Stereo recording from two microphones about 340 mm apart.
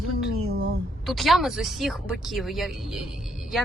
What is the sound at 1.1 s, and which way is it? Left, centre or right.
Speech, centre.